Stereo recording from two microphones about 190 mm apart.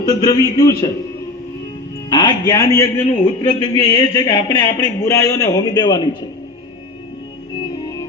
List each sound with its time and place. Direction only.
0.1 s a man's voice: 20° left (ahead or behind)
2.0 s a man's voice: 20° left (ahead or behind)
7.6 s music: 20° left (ahead or behind)